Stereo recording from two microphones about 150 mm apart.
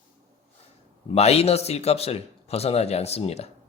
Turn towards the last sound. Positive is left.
turn(degrees=45)  # may be behind; listen again after turning